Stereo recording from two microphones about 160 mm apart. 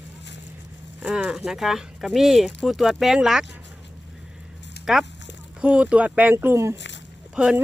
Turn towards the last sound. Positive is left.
turn(degrees=-5)  # may be behind; listen again after turning